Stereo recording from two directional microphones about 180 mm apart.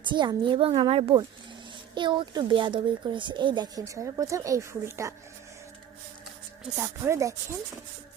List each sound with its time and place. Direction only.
0.1 s speech: 25° right (ahead or behind)
6.7 s speech: 15° right (ahead or behind)